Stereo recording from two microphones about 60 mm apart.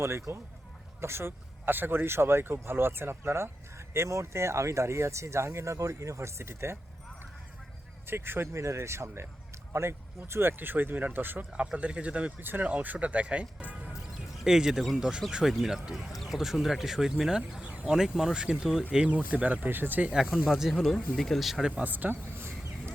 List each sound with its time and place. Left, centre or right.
0.0 s speech: right
8.0 s speech: right
11.5 s speech: centre
12.4 s speech: right
20.1 s speech: centre
20.9 s speech: centre
21.8 s speech: right
22.4 s a sound: right